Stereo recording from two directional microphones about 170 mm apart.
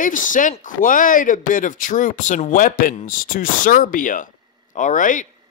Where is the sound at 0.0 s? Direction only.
50° left (ahead or behind).